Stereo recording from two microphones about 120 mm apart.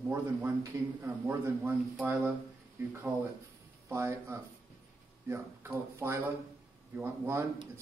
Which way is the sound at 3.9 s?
25° right (ahead or behind).